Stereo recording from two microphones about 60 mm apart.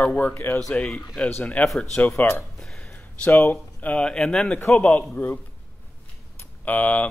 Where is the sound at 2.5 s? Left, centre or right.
Centre.